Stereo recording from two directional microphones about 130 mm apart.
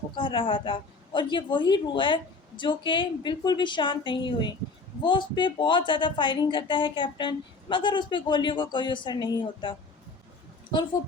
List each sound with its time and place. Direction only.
0.2 s speech: 40° left (ahead or behind)